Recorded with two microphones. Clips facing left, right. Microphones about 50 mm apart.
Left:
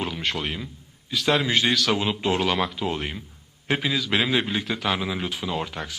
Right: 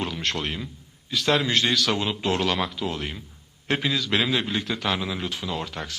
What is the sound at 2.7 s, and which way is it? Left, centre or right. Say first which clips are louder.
Speech: left 2 dB; centre.